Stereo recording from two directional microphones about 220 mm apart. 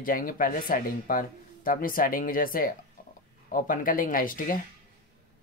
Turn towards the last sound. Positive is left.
turn(degrees=40)  # may be behind; listen again after turning